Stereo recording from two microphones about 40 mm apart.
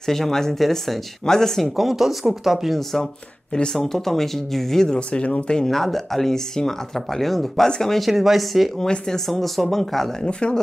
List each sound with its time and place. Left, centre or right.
0.0 s speech: centre
1.8 s speech: centre
3.7 s speech: centre
5.1 s speech: left
5.7 s speech: centre
8.0 s speech: centre
8.7 s speech: centre
9.3 s speech: centre
10.2 s speech: centre